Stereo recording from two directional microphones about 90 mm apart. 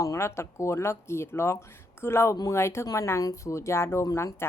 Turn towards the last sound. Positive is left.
turn(degrees=40)  # may be behind; listen again after turning